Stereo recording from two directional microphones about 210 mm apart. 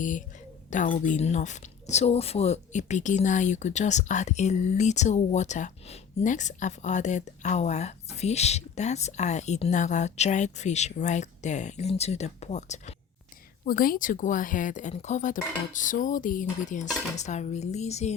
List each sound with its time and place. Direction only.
0.0 s speech: 40° left (ahead or behind)